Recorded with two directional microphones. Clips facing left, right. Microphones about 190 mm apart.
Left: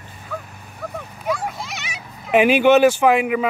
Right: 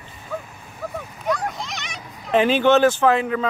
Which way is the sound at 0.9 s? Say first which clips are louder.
Even; centre (ahead or behind).